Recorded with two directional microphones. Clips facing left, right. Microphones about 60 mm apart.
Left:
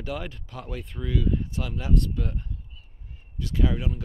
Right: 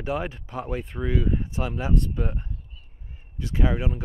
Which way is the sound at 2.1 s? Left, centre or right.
Right.